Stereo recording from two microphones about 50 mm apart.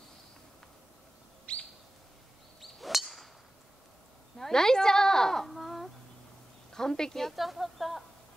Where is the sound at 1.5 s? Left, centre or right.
Left.